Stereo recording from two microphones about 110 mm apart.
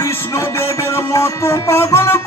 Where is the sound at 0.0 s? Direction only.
25° left (ahead or behind).